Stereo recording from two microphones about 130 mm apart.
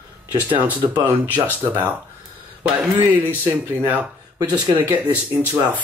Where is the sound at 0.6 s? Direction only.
35° right (ahead or behind).